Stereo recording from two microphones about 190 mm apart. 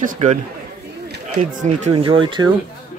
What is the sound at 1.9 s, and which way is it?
Speech, 30° right (ahead or behind).